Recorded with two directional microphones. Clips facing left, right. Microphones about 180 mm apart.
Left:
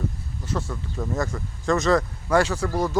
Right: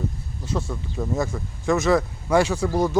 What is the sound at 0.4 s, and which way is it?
Speech, 10° right (ahead or behind).